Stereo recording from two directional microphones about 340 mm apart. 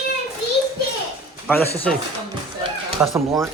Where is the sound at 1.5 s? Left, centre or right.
Centre.